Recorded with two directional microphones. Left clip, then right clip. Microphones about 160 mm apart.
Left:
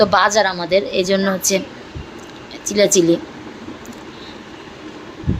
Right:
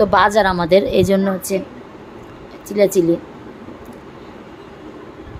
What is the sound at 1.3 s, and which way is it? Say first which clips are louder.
Speech: left 3 dB; 10° right (ahead or behind).